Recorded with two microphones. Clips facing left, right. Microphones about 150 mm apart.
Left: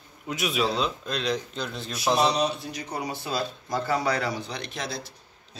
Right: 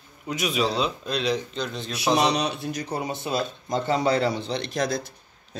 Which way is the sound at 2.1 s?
70° right (ahead or behind).